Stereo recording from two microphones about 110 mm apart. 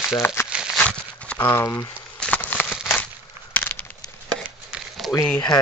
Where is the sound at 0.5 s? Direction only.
5° right (ahead or behind).